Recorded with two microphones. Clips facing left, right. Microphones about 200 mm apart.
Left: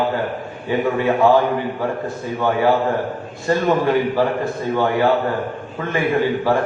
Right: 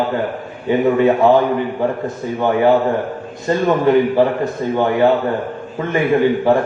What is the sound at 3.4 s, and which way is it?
A man's voice, 20° right (ahead or behind).